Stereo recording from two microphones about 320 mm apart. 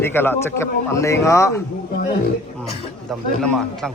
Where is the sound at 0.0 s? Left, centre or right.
Centre.